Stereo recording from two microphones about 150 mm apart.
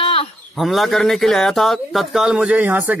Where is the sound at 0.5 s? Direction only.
Centre (ahead or behind).